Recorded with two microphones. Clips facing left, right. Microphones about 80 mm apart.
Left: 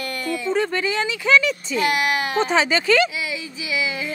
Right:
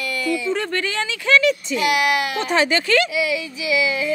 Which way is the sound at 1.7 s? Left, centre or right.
Left.